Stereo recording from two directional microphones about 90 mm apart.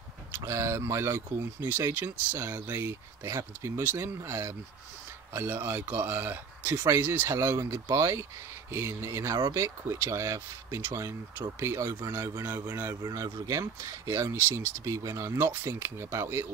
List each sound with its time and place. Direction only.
0.3 s speech: 35° right (ahead or behind)
12.4 s speech: 45° right (ahead or behind); by 16.4 s 30° right (ahead or behind)